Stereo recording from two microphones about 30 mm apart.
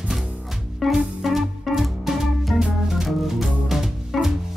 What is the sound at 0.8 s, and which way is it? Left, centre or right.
Music, centre.